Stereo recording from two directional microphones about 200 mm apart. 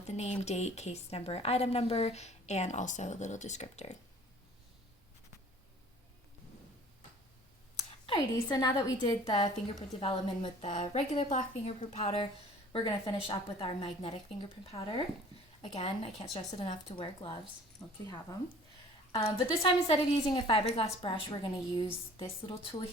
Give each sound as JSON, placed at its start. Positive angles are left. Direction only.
{"t": 0.1, "sound": "a woman's voice", "side_deg": 35}
{"t": 7.8, "sound": "a woman's voice", "side_deg": 25}
{"t": 19.6, "sound": "a woman's voice", "side_deg": 30}